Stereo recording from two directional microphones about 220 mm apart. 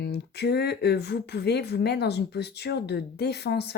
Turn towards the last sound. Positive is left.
turn(degrees=50)  # may be behind; listen again after turning